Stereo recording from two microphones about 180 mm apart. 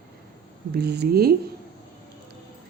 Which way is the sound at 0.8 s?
65° right (ahead or behind).